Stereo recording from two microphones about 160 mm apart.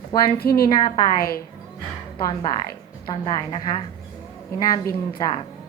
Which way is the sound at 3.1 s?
30° left (ahead or behind).